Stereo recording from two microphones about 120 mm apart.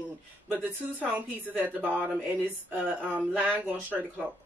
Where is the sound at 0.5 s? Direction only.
15° right (ahead or behind).